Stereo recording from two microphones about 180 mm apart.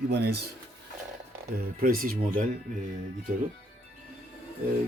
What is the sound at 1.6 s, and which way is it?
Speech, 55° right (ahead or behind).